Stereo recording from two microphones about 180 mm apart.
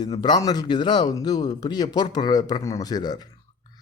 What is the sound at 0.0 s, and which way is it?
Speech, 25° left (ahead or behind).